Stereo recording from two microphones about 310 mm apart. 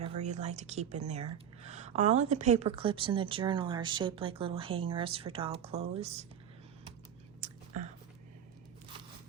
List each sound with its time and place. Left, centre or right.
0.0 s speech: right